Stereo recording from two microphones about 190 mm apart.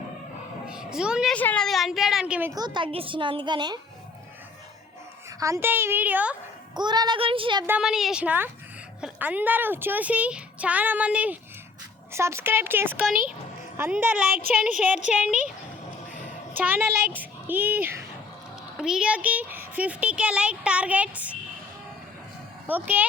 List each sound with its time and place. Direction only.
0.7 s a woman's voice: 5° right (ahead or behind)
2.5 s a woman's voice: 20° right (ahead or behind)
5.4 s speech: 15° right (ahead or behind)
6.7 s a woman's voice: 20° right (ahead or behind)
7.7 s a woman's voice: 5° right (ahead or behind)
16.6 s speech: 10° right (ahead or behind)
22.6 s speech: 10° right (ahead or behind)